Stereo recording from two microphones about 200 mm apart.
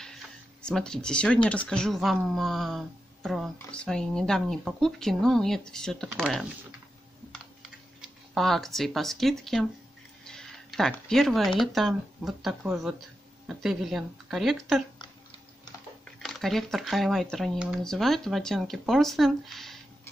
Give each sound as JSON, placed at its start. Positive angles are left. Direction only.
{"t": 0.6, "sound": "speech", "side_deg": 5}
{"t": 7.3, "sound": "computer keyboard", "side_deg": 0}
{"t": 10.2, "sound": "speech", "side_deg": 0}
{"t": 16.2, "sound": "speech", "side_deg": 0}